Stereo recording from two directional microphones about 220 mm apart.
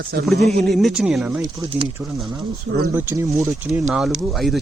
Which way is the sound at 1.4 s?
20° right (ahead or behind).